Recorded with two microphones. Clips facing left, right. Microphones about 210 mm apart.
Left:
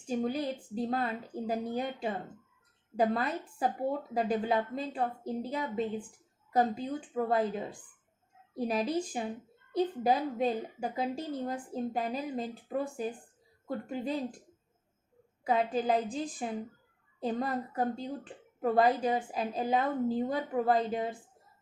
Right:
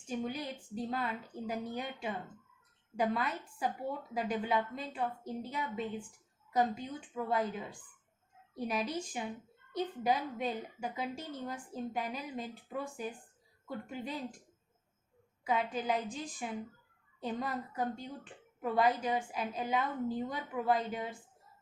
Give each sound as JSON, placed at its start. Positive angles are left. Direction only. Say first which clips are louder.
{"t": 0.2, "sound": "a woman's voice", "louder": "left 8 dB", "side_deg": 35}
{"t": 7.3, "sound": "a woman's voice", "louder": "left 4 dB", "side_deg": 35}
{"t": 15.4, "sound": "a woman's voice", "louder": "left 5 dB", "side_deg": 35}